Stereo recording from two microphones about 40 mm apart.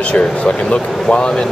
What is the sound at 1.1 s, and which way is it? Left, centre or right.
Speech, left.